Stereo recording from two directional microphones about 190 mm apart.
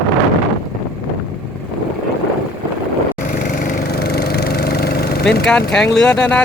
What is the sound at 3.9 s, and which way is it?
Engine, 60° left (ahead or behind).